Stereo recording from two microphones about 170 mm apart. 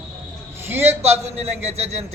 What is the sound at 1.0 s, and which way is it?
Speech, 40° right (ahead or behind).